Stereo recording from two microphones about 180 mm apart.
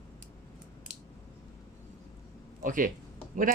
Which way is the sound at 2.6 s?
50° right (ahead or behind).